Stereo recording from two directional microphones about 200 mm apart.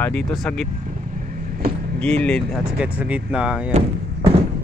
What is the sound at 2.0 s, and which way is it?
Speech, 5° left (ahead or behind).